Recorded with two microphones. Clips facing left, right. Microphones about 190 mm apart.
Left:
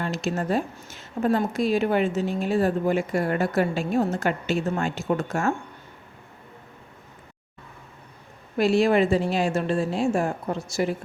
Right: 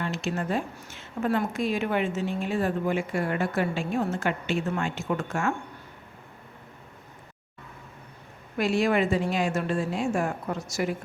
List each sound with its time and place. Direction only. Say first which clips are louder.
0.0 s a woman's voice: left 3 dB; 40° left (ahead or behind)
8.5 s a woman's voice: left 4 dB; 30° left (ahead or behind)